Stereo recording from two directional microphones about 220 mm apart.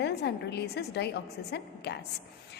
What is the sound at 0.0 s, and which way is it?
A woman's voice, 50° left (ahead or behind).